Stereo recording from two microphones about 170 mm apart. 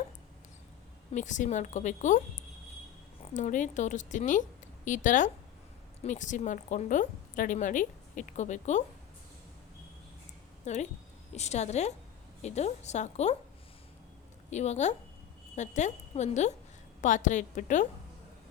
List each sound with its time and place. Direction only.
1.1 s a woman's voice: 45° left (ahead or behind)
10.7 s a woman's voice: 40° left (ahead or behind)
14.5 s a woman's voice: 40° left (ahead or behind)